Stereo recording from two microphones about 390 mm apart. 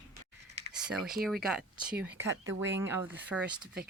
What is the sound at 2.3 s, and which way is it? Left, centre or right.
Speech, right.